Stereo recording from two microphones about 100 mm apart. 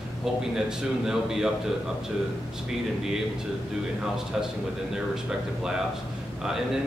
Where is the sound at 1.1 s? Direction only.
5° right (ahead or behind).